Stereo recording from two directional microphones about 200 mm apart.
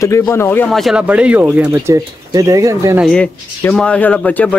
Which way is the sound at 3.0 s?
5° left (ahead or behind).